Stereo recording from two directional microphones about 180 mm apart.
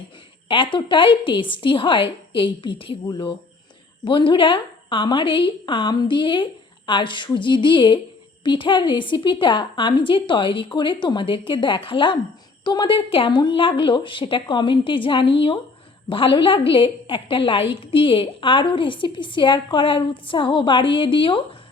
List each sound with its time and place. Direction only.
0.4 s a woman's voice: 30° left (ahead or behind)